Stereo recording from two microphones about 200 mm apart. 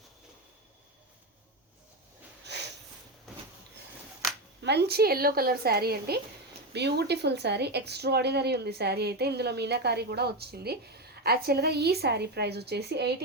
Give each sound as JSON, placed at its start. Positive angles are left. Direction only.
{"t": 2.5, "sound": "sniff", "side_deg": -55}
{"t": 4.6, "sound": "a woman's voice", "side_deg": -55}